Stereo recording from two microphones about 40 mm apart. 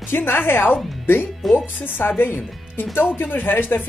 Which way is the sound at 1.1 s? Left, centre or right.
Left.